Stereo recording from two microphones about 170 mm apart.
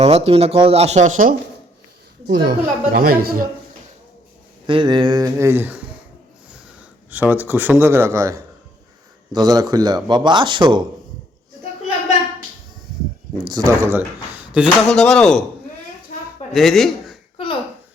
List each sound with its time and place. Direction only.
0.0 s speech: 35° right (ahead or behind)
2.2 s a woman's voice: 60° right (ahead or behind)
4.6 s speech: 30° right (ahead or behind); by 5.8 s 10° right (ahead or behind)
7.1 s speech: 10° right (ahead or behind); by 10.8 s 25° right (ahead or behind)
13.5 s speech: 20° right (ahead or behind)
14.8 s speech: 5° left (ahead or behind)
16.5 s speech: centre (ahead or behind)
17.3 s a sound: 30° left (ahead or behind)